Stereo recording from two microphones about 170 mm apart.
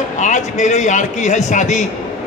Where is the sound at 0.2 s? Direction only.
45° left (ahead or behind).